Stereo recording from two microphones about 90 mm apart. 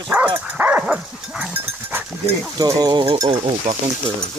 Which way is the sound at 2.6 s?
45° right (ahead or behind).